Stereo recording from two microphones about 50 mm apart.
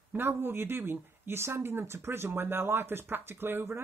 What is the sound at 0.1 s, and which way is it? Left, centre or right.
Speech, right.